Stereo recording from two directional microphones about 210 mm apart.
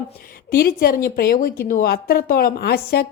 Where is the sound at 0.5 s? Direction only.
45° left (ahead or behind).